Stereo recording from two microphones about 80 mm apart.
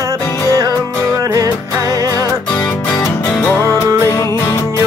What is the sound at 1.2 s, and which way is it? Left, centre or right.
Music, right.